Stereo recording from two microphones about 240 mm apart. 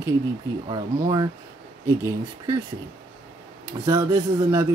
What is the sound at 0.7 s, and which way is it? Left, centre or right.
Speech, centre.